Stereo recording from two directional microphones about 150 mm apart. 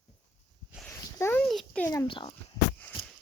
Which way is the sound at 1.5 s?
5° left (ahead or behind).